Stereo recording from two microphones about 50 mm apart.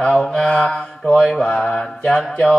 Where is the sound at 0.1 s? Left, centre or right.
Centre.